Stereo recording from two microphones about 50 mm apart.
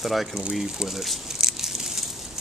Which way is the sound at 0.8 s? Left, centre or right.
Centre.